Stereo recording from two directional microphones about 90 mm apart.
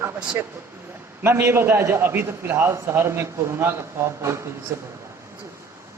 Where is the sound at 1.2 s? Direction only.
25° right (ahead or behind).